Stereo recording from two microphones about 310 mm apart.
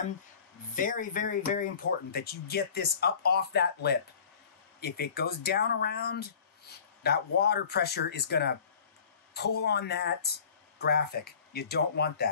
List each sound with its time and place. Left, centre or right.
0.7 s speech: left